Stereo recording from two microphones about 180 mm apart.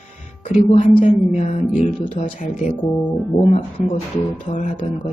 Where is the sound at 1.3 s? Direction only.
45° left (ahead or behind).